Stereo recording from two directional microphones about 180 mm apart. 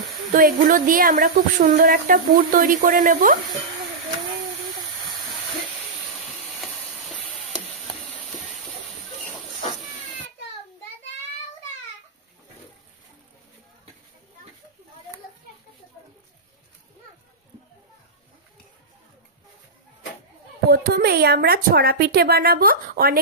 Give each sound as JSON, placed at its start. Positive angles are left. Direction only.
{"t": 0.3, "sound": "a woman's voice", "side_deg": -50}
{"t": 20.7, "sound": "a woman's voice", "side_deg": -60}